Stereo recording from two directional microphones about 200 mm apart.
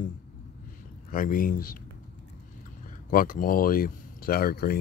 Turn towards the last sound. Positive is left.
turn(degrees=50)  # may be behind; listen again after turning